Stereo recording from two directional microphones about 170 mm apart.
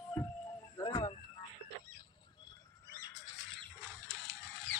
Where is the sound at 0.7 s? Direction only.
25° left (ahead or behind).